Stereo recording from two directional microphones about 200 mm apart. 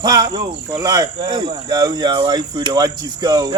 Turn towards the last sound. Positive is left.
turn(degrees=-20)  # may be behind; listen again after turning